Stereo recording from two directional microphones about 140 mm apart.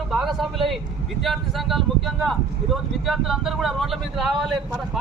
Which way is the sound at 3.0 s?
Centre (ahead or behind).